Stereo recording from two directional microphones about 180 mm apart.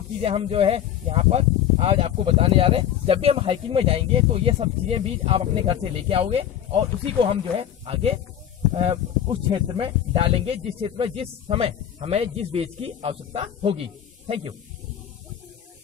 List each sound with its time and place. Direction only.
0.2 s speech: 30° right (ahead or behind)